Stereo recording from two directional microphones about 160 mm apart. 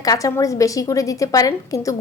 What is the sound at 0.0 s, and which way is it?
A woman's voice, 20° left (ahead or behind).